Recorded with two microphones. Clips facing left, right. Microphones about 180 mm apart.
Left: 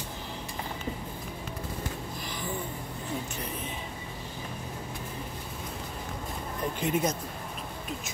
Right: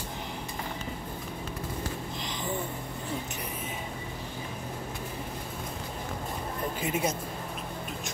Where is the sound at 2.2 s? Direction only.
20° right (ahead or behind).